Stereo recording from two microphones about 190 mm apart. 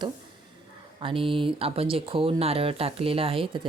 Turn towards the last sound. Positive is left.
turn(degrees=-30)  # may be behind; listen again after turning